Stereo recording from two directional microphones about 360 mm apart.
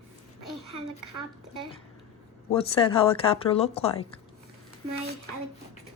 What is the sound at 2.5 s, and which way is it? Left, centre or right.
Speech, centre.